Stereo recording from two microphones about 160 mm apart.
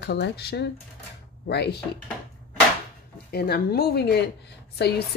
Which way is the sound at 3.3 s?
75° left (ahead or behind).